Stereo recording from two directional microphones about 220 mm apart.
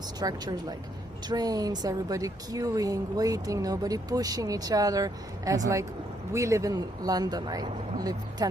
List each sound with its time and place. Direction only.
0.2 s speech: 20° right (ahead or behind)